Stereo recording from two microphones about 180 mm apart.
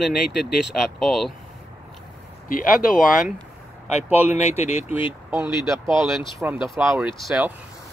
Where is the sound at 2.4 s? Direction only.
50° left (ahead or behind).